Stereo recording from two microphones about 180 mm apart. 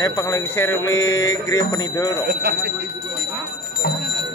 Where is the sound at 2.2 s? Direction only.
60° right (ahead or behind).